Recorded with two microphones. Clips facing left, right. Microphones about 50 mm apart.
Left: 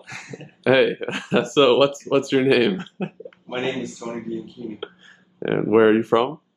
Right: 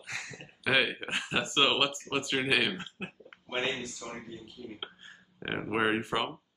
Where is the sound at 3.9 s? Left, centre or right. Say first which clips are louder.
Left 12 dB; left.